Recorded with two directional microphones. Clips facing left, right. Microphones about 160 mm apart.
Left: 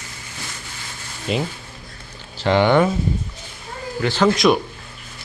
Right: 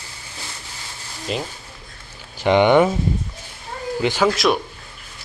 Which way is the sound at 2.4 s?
15° right (ahead or behind).